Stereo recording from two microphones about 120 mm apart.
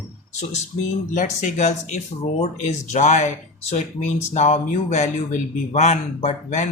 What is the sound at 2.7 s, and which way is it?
Speech, 85° left.